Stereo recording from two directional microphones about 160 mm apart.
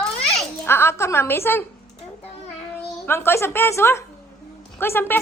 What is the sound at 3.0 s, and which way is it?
Speech, 15° left (ahead or behind).